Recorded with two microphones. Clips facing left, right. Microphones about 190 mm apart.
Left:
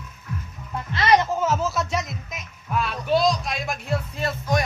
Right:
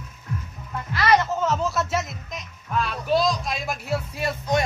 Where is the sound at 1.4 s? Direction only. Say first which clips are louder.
Even; 5° left (ahead or behind).